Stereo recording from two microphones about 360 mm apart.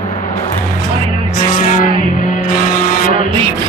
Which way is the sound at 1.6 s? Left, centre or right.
Left.